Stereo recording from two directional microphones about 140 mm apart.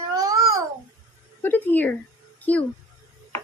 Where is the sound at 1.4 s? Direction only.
15° left (ahead or behind).